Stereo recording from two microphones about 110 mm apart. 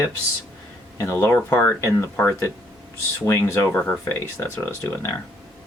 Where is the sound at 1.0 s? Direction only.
25° left (ahead or behind).